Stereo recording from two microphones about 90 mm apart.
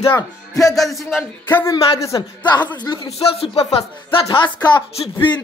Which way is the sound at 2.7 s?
60° left (ahead or behind).